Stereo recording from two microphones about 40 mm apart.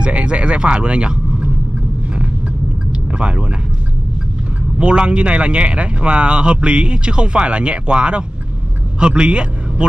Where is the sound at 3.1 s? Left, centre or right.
Right.